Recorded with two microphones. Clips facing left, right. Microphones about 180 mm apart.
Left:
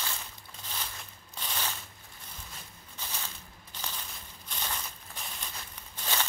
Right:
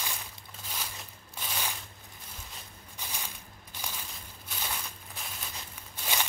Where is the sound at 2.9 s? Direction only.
10° right (ahead or behind).